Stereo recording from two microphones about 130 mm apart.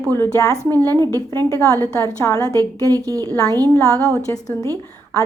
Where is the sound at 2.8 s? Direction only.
25° right (ahead or behind).